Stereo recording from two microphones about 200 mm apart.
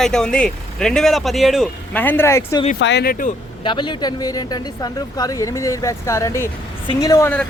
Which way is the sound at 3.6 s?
25° left (ahead or behind).